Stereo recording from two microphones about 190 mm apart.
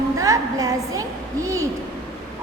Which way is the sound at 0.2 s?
15° right (ahead or behind).